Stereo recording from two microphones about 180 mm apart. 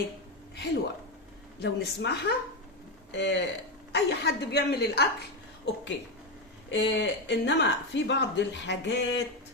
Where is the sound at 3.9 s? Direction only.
65° left (ahead or behind).